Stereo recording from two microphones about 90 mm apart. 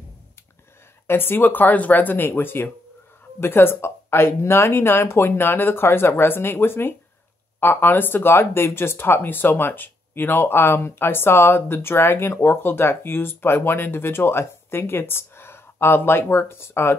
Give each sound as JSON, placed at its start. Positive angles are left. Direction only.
{"t": 1.0, "sound": "speech", "side_deg": 25}